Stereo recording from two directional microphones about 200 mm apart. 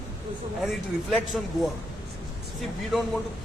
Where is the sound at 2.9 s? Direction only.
Centre (ahead or behind).